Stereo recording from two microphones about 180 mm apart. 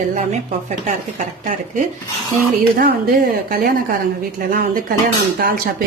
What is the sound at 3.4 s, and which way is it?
A woman's voice, 55° right (ahead or behind).